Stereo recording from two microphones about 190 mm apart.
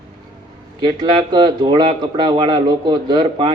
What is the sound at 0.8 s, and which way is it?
Speech, 25° right (ahead or behind).